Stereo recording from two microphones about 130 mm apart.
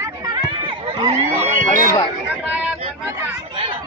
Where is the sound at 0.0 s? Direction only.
25° right (ahead or behind).